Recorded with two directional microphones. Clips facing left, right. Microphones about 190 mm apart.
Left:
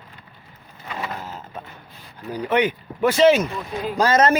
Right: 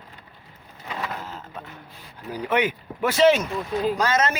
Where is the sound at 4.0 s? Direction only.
35° left (ahead or behind).